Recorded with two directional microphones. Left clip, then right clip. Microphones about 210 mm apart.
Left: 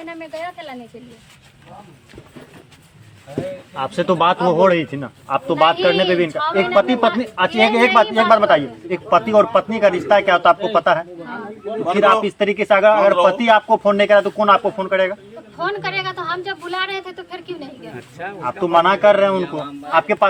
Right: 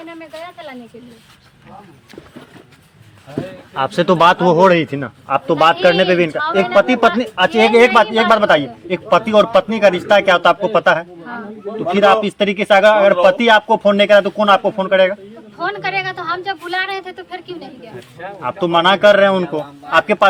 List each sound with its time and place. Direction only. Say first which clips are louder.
0.0 s speech: left 2 dB; 5° right (ahead or behind)
3.8 s a man's voice: right 5 dB; 50° right (ahead or behind)
6.3 s speech: right 2 dB; centre (ahead or behind)
6.7 s a man's voice: right 4 dB; 40° right (ahead or behind)
15.5 s a woman's voice: right 2 dB; 10° right (ahead or behind)
18.4 s a man's voice: right 1 dB; 50° right (ahead or behind)